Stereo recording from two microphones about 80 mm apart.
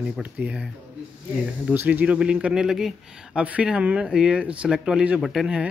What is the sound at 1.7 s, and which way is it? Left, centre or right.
Speech, right.